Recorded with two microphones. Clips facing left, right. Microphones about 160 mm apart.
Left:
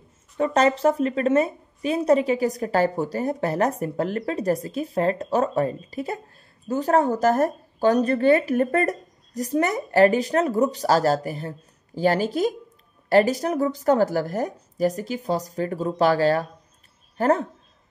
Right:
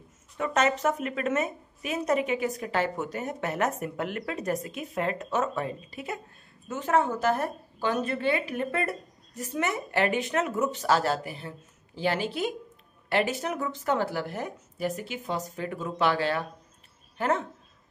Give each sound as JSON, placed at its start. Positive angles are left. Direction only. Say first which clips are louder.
{"t": 0.4, "sound": "a woman's voice", "louder": "left 6 dB", "side_deg": 30}